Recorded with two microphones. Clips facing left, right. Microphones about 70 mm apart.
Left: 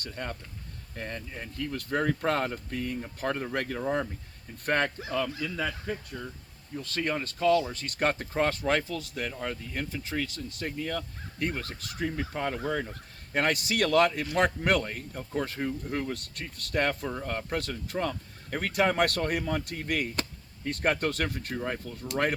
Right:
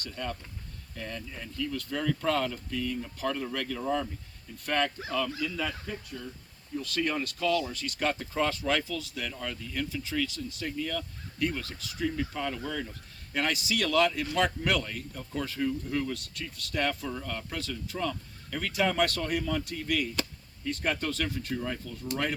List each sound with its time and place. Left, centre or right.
0.0 s speech: left
5.1 s speech: left
6.8 s speech: left
9.2 s speech: left
10.7 s speech: left
12.0 s speech: left
12.9 s a man's voice: left
17.6 s speech: left
21.5 s speech: left